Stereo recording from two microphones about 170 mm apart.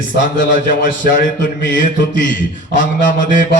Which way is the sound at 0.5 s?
55° left (ahead or behind).